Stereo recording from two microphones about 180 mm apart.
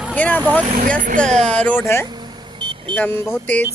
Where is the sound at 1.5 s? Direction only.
10° left (ahead or behind).